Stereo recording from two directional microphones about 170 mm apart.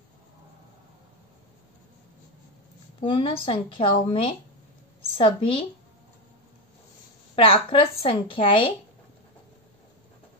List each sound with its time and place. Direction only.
3.0 s a woman's voice: 30° left (ahead or behind)
7.3 s a woman's voice: 35° left (ahead or behind)